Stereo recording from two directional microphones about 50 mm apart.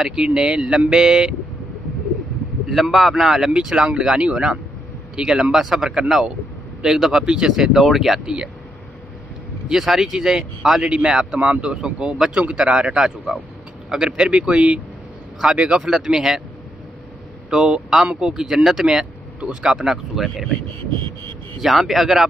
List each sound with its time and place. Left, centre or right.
0.0 s speech: centre
2.7 s speech: centre
9.7 s speech: centre
10.8 s speech: centre
17.5 s speech: centre
18.9 s speech: centre
21.5 s speech: centre